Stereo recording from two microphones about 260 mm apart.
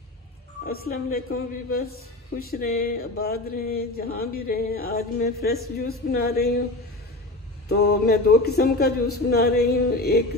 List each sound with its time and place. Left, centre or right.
0.7 s a woman's voice: left
7.6 s a woman's voice: left